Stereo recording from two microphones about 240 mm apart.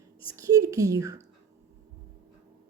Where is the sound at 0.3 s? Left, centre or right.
Centre.